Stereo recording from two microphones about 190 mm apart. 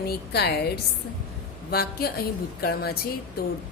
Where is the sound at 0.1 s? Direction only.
60° left (ahead or behind).